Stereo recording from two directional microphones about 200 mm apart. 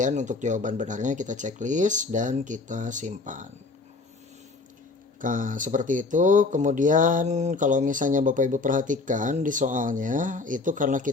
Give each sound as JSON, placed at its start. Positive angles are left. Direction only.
{"t": 0.0, "sound": "speech", "side_deg": -35}
{"t": 5.2, "sound": "speech", "side_deg": -40}